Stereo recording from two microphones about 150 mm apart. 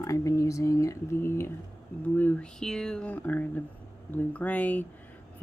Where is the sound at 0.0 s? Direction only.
20° left (ahead or behind).